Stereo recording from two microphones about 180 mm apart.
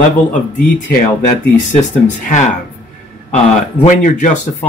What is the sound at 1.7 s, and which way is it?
Speech, 40° left (ahead or behind).